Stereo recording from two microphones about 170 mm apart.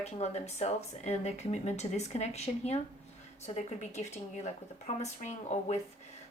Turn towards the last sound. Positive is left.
turn(degrees=40)  # may be behind; listen again after turning